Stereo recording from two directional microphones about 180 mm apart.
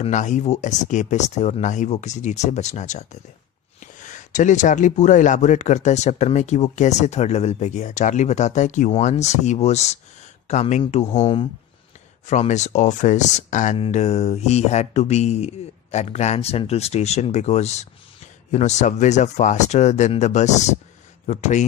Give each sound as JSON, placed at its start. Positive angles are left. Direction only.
{"t": 0.0, "sound": "speech", "side_deg": 45}
{"t": 12.3, "sound": "speech", "side_deg": 40}